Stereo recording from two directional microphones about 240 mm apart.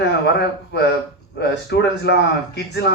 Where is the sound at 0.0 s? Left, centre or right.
Left.